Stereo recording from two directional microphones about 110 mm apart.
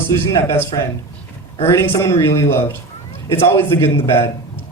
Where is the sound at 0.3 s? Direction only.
25° left (ahead or behind).